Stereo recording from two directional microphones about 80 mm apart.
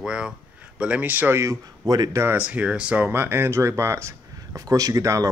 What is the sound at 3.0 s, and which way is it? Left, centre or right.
Speech, right.